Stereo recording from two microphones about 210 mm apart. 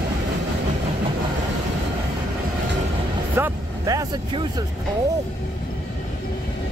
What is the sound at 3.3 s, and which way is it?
Vehicle, 15° right (ahead or behind).